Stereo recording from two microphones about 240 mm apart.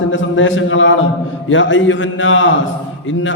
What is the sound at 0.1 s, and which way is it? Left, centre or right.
A man's voice, left.